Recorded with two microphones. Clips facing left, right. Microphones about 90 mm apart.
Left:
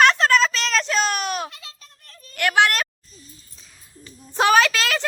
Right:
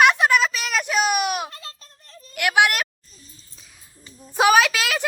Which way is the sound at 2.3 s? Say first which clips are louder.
Even; 10° right (ahead or behind).